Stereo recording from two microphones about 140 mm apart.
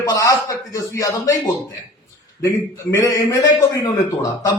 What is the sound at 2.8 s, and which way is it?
A man's voice, 20° left (ahead or behind).